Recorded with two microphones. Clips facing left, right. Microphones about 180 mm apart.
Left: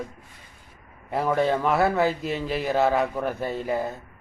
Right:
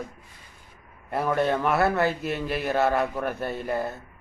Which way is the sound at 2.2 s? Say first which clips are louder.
Left 1 dB; 60° right (ahead or behind).